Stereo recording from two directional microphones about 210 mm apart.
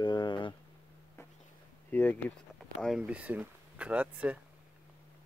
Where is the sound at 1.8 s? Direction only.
10° left (ahead or behind).